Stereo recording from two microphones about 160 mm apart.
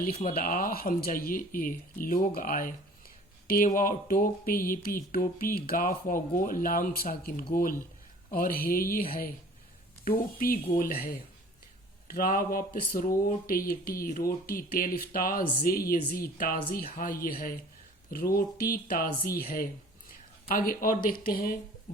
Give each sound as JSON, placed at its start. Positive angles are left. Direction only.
{"t": 0.0, "sound": "speech", "side_deg": 60}
{"t": 21.9, "sound": "music", "side_deg": 60}